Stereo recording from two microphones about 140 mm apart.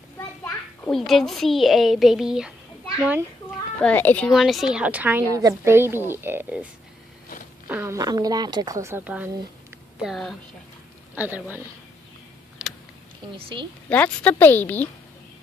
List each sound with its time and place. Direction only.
0.8 s a child's voice: centre (ahead or behind)
3.0 s speech: 20° right (ahead or behind)
3.8 s a woman's voice: 10° left (ahead or behind)
4.3 s a child's voice: centre (ahead or behind)
5.3 s a woman's voice: 20° right (ahead or behind); by 10.3 s centre (ahead or behind)
11.1 s a woman's voice: 10° right (ahead or behind)
12.6 s a sound: 5° right (ahead or behind)
13.4 s a woman's voice: 40° right (ahead or behind)
13.8 s a woman's voice: 10° left (ahead or behind)